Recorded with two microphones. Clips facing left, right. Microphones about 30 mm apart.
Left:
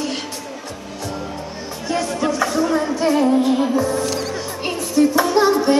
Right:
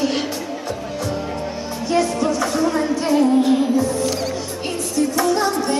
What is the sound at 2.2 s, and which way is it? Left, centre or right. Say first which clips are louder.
Music: even; centre.